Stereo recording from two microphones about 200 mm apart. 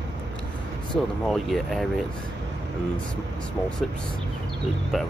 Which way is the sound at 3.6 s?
5° left (ahead or behind).